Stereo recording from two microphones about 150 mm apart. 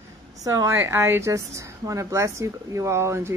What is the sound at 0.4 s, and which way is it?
A woman's voice, 20° right (ahead or behind).